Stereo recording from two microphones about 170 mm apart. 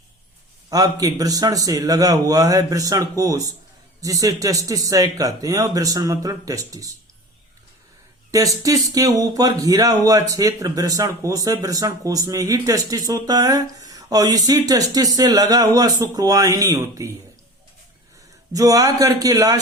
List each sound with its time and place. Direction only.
0.7 s speech: 20° right (ahead or behind)
8.3 s speech: 20° right (ahead or behind)
18.5 s speech: 20° right (ahead or behind)